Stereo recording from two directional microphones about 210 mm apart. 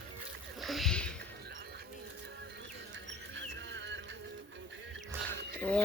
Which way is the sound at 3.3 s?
60° right (ahead or behind).